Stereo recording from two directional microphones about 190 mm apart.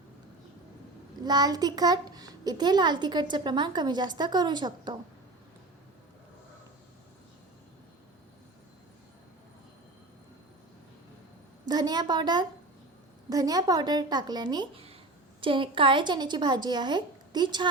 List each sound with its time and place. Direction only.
1.2 s a child's voice: 20° right (ahead or behind)
11.6 s a child's voice: 20° right (ahead or behind)